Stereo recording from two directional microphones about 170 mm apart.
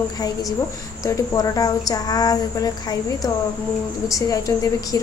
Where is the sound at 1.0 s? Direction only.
20° left (ahead or behind).